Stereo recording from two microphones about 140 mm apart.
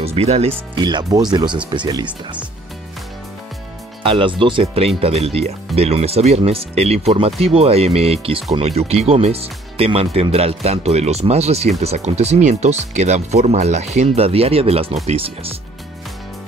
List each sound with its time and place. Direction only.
0.0 s speech: 45° right (ahead or behind)
0.7 s speech: 30° right (ahead or behind)
4.0 s speech: 40° right (ahead or behind)